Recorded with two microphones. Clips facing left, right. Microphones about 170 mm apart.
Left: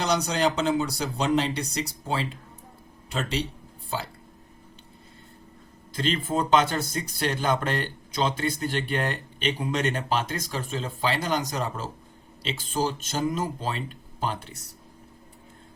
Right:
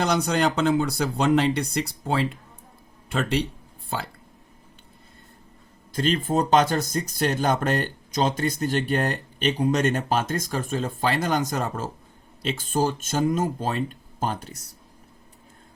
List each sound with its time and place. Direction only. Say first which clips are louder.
0.0 s speech: right 2 dB; 50° right (ahead or behind)
5.9 s speech: right 4 dB; 45° right (ahead or behind)